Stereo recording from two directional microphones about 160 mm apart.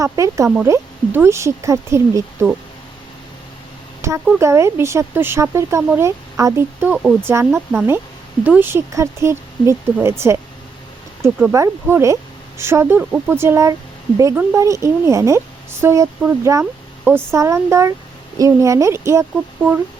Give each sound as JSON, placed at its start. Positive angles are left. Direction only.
{"t": 0.0, "sound": "speech", "side_deg": -20}
{"t": 4.0, "sound": "a sound", "side_deg": -15}
{"t": 4.4, "sound": "speech", "side_deg": -15}